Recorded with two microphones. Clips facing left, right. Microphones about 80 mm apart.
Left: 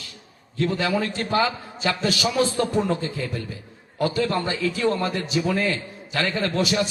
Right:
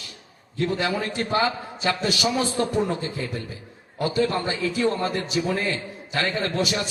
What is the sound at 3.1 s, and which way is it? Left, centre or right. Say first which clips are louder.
A man's voice: left 1 dB; right.